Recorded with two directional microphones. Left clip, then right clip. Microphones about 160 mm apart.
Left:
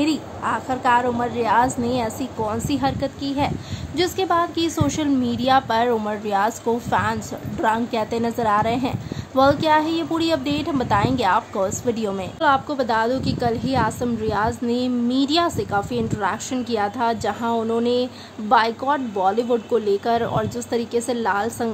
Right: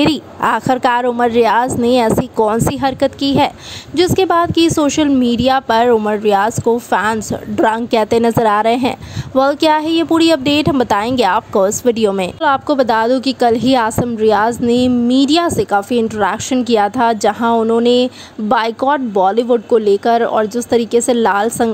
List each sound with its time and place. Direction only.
0.0 s a woman's voice: 70° right (ahead or behind)
3.9 s a woman's voice: 45° right (ahead or behind)